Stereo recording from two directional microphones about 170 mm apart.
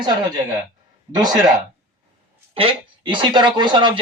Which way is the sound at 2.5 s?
30° right (ahead or behind).